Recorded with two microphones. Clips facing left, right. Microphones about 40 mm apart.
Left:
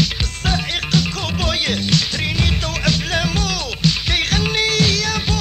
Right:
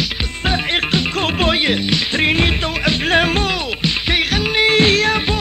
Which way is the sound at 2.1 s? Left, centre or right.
Right.